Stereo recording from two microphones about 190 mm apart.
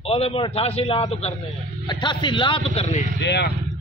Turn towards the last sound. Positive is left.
turn(degrees=60)  # may be behind; listen again after turning